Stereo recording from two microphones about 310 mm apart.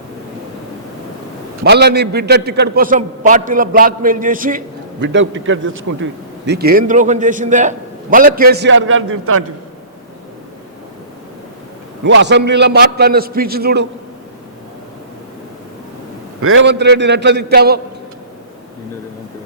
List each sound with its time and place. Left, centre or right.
1.6 s a man's voice: right
12.0 s a man's voice: right
16.4 s a man's voice: right